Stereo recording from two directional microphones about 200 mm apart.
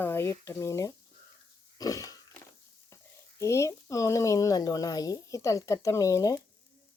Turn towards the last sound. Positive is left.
turn(degrees=15)  # may be behind; listen again after turning